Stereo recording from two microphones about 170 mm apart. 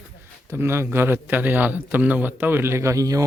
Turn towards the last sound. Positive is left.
turn(degrees=-20)  # may be behind; listen again after turning